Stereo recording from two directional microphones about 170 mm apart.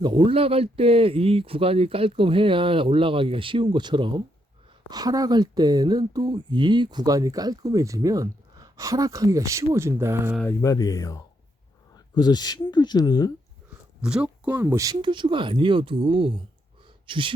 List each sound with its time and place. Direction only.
0.0 s speech: 30° right (ahead or behind)
10.6 s speech: 20° left (ahead or behind)
14.0 s speech: 5° right (ahead or behind); by 17.3 s 30° right (ahead or behind)